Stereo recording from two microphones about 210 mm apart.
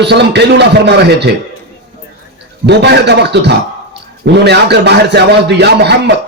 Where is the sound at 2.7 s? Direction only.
55° right (ahead or behind).